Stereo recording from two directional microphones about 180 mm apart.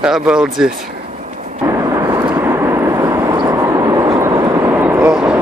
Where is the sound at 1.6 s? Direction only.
20° right (ahead or behind); by 5.3 s 5° right (ahead or behind).